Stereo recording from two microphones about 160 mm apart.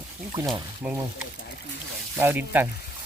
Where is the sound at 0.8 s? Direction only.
15° right (ahead or behind).